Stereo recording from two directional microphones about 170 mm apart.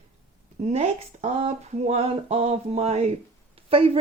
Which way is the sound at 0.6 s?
40° right (ahead or behind).